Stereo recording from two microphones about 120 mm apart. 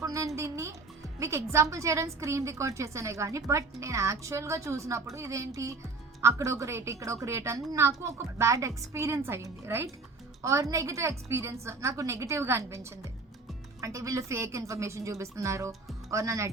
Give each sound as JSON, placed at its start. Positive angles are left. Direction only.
{"t": 0.0, "sound": "music", "side_deg": -25}
{"t": 1.2, "sound": "a woman's voice", "side_deg": -25}